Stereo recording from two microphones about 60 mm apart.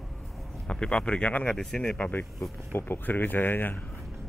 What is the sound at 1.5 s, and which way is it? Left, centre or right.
Speech, centre.